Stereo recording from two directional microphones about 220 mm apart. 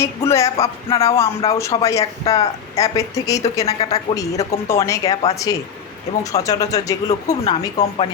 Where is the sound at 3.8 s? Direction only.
25° left (ahead or behind).